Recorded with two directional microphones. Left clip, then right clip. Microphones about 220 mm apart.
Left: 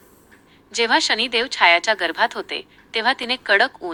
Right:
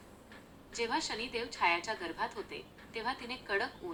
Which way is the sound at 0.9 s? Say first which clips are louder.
Left 19 dB; 40° left (ahead or behind).